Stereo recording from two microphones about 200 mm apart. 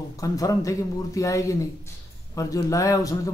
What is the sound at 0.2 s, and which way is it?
Speech, 15° left (ahead or behind).